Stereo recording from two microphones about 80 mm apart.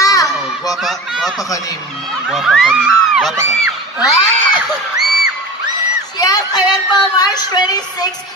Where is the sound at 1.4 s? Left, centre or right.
Left.